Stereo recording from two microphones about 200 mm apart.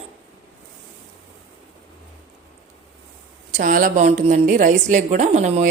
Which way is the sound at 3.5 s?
40° right (ahead or behind).